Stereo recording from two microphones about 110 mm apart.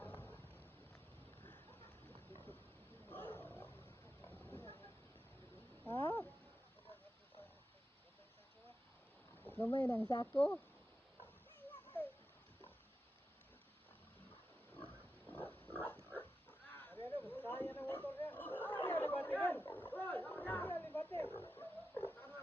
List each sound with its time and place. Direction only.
0.0 s boat: 15° left (ahead or behind)
3.1 s roaring cats: 15° left (ahead or behind)
4.2 s vehicle: 20° left (ahead or behind)
5.8 s a sound: 20° left (ahead or behind)
9.5 s speech: 20° left (ahead or behind)
10.3 s speech: 10° left (ahead or behind)
15.3 s pig: 15° left (ahead or behind)
16.6 s a sound: 15° left (ahead or behind)
18.9 s chatter: 20° left (ahead or behind)
19.5 s a sound: 15° left (ahead or behind)
21.2 s dog: 20° left (ahead or behind)
21.5 s a sound: 20° left (ahead or behind)